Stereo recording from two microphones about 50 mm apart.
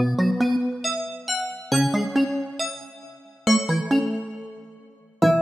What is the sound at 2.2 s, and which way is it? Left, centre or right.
Music, left.